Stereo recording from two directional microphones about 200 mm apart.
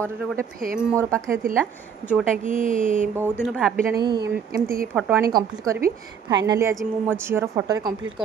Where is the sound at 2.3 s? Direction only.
40° right (ahead or behind).